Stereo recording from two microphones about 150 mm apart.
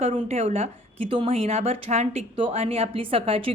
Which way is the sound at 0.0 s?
50° right (ahead or behind).